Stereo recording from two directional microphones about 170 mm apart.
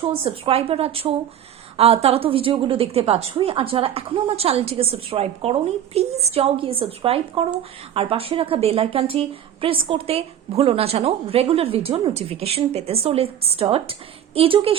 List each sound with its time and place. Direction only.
0.0 s a woman's voice: 35° right (ahead or behind)